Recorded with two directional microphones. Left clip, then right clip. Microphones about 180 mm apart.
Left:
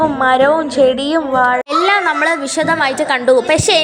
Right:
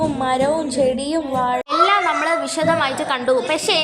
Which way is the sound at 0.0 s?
15° left (ahead or behind).